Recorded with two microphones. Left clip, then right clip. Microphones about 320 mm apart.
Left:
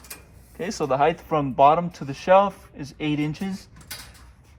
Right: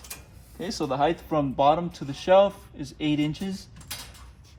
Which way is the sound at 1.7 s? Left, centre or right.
Centre.